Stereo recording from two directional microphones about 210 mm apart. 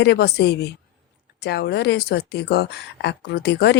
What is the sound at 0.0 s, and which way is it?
Speech, 50° left (ahead or behind).